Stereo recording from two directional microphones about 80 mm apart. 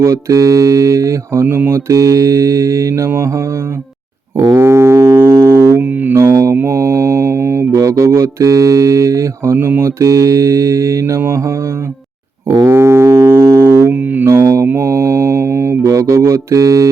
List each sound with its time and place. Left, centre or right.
0.0 s mantra: right
1.9 s mantra: right
4.5 s music: right
5.8 s music: right
6.1 s mantra: right
11.3 s speech: right
12.6 s music: right
13.9 s music: centre
14.3 s mantra: right